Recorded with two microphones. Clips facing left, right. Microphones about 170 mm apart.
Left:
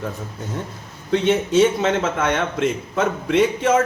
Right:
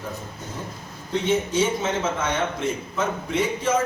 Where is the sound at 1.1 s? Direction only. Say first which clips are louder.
Left 6 dB; 70° left (ahead or behind).